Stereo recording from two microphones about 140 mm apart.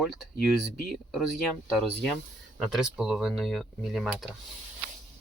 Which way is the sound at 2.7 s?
5° right (ahead or behind).